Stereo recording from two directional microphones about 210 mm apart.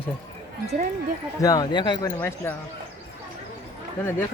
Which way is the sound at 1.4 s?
20° left (ahead or behind).